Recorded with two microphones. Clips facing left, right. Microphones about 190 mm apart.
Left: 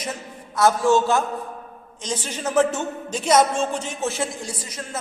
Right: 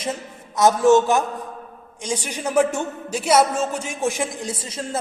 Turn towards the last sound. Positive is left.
turn(degrees=-25)  # may be behind; listen again after turning